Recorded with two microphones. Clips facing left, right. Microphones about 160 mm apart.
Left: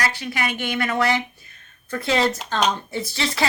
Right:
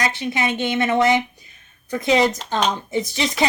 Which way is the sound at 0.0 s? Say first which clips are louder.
Right 3 dB; 20° right (ahead or behind).